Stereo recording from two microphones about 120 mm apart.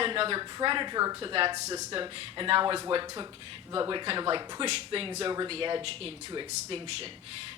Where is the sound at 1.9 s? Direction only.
45° right (ahead or behind).